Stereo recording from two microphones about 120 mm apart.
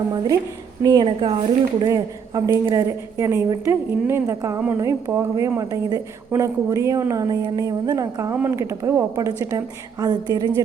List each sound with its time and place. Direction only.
0.8 s a woman's voice: 35° right (ahead or behind)
1.0 s speech: 45° right (ahead or behind)
1.8 s a woman's voice: 35° right (ahead or behind)